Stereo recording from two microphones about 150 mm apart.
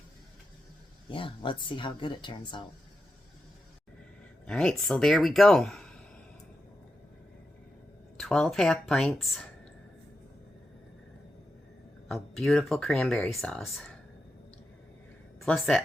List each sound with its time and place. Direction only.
1.1 s speech: 35° left (ahead or behind)
4.4 s speech: 5° left (ahead or behind)
8.2 s speech: 5° left (ahead or behind)
12.0 s speech: centre (ahead or behind)
15.4 s speech: centre (ahead or behind)